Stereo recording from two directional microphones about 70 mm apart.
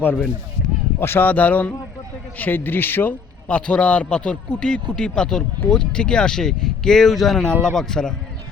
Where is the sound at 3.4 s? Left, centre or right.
Centre.